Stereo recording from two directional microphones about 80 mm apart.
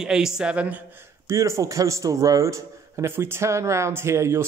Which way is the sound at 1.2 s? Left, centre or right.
Right.